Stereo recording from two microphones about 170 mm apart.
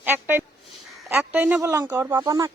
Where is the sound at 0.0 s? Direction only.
10° right (ahead or behind).